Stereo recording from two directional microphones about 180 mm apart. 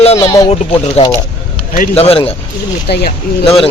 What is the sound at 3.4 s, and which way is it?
Speech, 30° left (ahead or behind).